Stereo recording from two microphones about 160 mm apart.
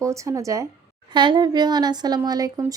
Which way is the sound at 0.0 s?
20° right (ahead or behind).